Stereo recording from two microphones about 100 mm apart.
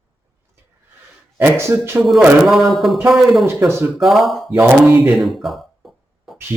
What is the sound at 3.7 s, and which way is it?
Speech, 25° right (ahead or behind).